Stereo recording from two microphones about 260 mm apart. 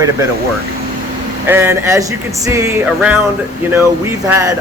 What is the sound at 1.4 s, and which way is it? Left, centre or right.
Speech, centre.